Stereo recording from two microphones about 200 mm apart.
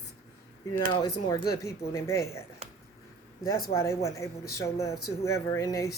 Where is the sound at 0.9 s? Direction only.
20° left (ahead or behind).